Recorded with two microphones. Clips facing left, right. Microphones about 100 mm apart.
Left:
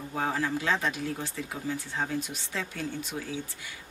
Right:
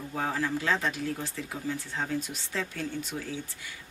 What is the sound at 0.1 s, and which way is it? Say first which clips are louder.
Speech: left 1 dB; 10° left (ahead or behind).